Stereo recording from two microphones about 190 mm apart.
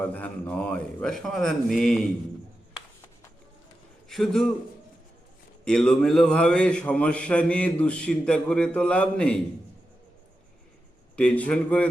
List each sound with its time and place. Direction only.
0.0 s a man's voice: 5° left (ahead or behind)
4.1 s a man's voice: centre (ahead or behind)
5.6 s a man's voice: 5° left (ahead or behind)
11.2 s a man's voice: 5° left (ahead or behind)